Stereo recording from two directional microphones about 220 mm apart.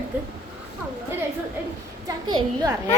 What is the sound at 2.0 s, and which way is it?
Speech, 15° right (ahead or behind).